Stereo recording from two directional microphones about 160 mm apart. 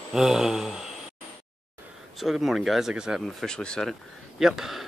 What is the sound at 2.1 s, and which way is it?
Speech, centre (ahead or behind).